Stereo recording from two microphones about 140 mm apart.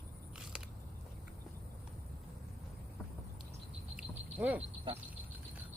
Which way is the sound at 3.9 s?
10° right (ahead or behind).